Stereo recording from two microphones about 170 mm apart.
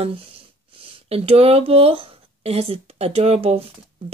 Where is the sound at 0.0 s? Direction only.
35° right (ahead or behind).